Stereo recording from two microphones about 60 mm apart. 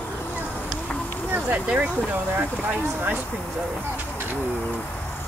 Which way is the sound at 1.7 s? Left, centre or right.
Right.